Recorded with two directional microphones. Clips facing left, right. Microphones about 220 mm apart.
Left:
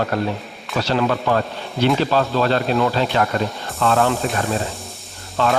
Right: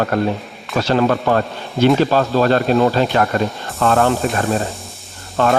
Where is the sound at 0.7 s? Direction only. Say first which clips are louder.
Right 4 dB; 45° right (ahead or behind).